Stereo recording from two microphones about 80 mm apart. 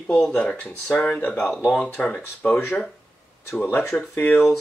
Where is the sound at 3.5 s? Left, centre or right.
Left.